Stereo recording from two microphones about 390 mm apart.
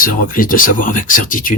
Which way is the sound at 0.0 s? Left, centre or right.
Left.